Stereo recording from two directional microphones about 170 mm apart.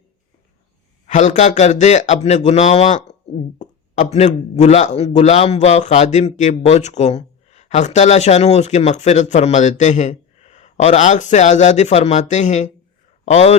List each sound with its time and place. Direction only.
1.0 s speech: 45° left (ahead or behind)